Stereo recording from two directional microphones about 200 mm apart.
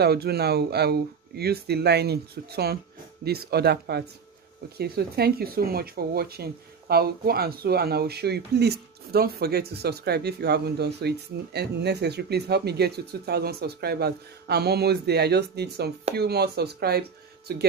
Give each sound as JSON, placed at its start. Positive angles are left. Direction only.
{"t": 0.0, "sound": "speech", "side_deg": -55}